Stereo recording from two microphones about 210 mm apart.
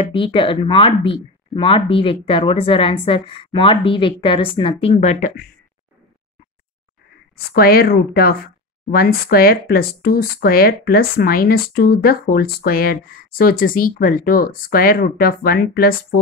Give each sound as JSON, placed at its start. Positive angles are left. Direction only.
{"t": 0.0, "sound": "speech", "side_deg": 25}
{"t": 7.3, "sound": "speech", "side_deg": 45}